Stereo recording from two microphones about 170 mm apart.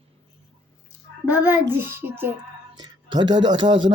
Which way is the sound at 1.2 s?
10° right (ahead or behind).